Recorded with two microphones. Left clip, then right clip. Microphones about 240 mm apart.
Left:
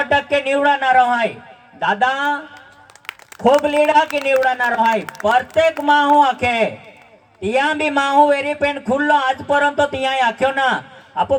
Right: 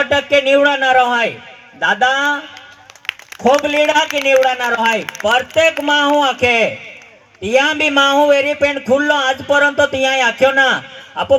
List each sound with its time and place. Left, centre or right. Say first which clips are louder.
0.0 s speech: right 3 dB; right
3.1 s a sound: right 8 dB; left
3.6 s speech: right 1 dB; right